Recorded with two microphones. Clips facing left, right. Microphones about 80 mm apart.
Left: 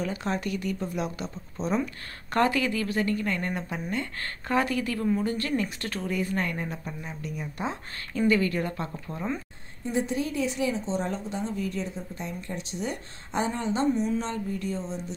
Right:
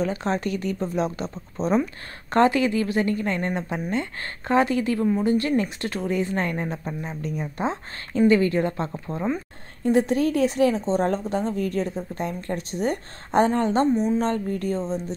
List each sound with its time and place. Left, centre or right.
0.0 s speech: right
2.3 s a woman's voice: right
9.8 s a woman's voice: right